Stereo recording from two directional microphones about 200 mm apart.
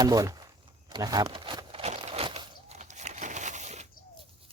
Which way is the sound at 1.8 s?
35° right (ahead or behind).